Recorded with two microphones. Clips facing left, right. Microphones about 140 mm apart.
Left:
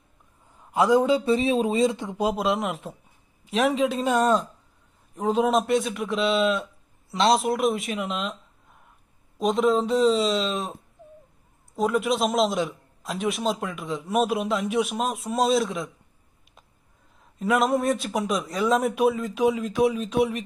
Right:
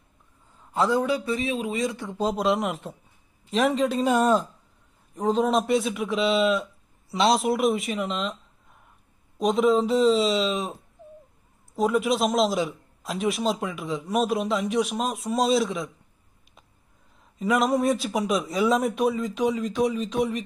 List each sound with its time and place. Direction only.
0.5 s speech: 15° left (ahead or behind)
2.3 s a man's voice: centre (ahead or behind)
9.4 s a man's voice: centre (ahead or behind)
17.4 s a man's voice: centre (ahead or behind)